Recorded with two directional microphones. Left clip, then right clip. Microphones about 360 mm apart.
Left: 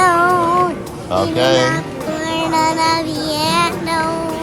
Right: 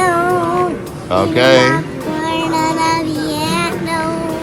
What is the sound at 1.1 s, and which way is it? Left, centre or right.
Speech, centre.